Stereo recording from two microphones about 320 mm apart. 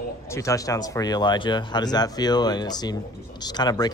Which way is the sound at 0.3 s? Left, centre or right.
Centre.